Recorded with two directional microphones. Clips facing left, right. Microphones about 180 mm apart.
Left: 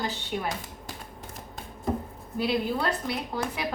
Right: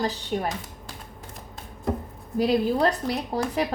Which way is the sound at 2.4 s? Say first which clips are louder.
Right 6 dB; 40° right (ahead or behind).